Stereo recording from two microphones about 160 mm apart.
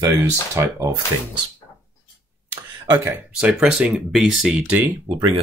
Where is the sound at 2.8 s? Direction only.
20° right (ahead or behind).